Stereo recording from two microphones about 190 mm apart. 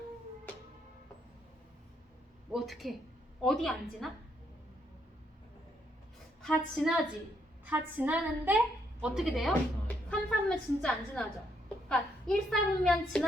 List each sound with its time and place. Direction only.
2.5 s a woman's voice: centre (ahead or behind)
6.4 s a woman's voice: centre (ahead or behind)